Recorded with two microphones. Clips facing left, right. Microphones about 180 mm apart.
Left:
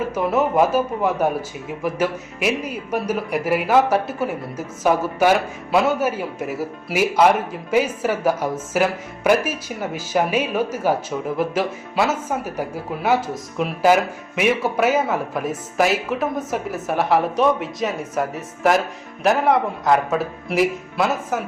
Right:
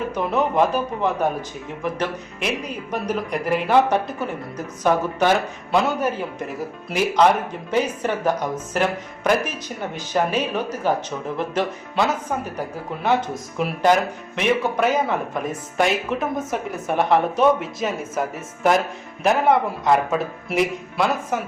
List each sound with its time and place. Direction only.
0.1 s speech: 5° left (ahead or behind)